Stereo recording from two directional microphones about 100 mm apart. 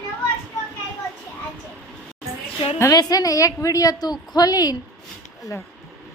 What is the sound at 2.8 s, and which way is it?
A woman's voice, 35° left (ahead or behind).